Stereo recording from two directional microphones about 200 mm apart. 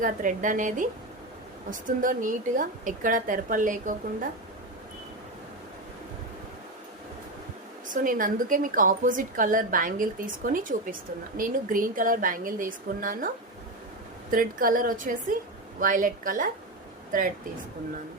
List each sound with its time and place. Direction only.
0.0 s a woman's voice: 40° right (ahead or behind)
2.0 s a woman's voice: 40° right (ahead or behind)
7.9 s a woman's voice: 40° right (ahead or behind)